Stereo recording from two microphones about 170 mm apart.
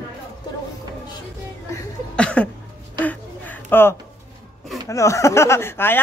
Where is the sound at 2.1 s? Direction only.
5° left (ahead or behind).